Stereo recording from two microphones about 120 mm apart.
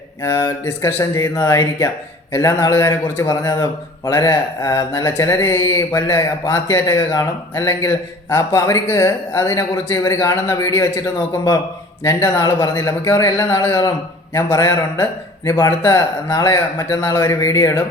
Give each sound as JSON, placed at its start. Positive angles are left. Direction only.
{"t": 0.2, "sound": "a man's voice", "side_deg": 25}